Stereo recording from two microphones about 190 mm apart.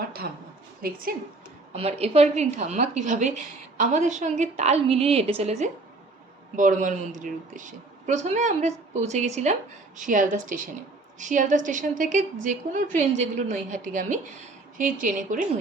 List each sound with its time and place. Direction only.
0.8 s a woman's voice: 50° right (ahead or behind)
1.7 s a woman's voice: 35° right (ahead or behind)